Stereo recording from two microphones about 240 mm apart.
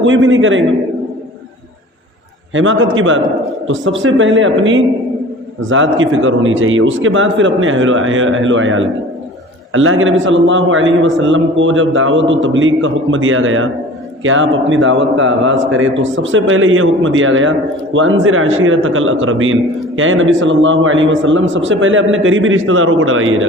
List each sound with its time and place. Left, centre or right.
0.0 s a man's voice: right
2.5 s a man's voice: right
14.7 s a man's voice: right